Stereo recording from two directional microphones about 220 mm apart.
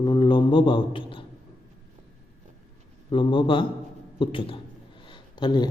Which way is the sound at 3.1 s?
20° left (ahead or behind).